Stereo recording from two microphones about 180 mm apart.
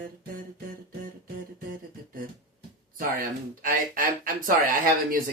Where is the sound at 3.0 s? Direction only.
50° right (ahead or behind).